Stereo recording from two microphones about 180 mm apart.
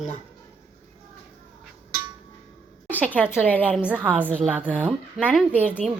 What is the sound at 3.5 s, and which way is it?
Speech, 10° left (ahead or behind).